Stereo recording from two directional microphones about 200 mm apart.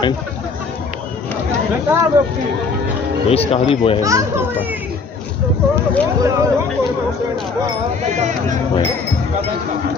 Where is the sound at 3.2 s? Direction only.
30° left (ahead or behind).